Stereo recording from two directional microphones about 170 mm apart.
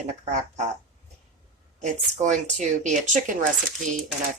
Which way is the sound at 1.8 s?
45° right (ahead or behind).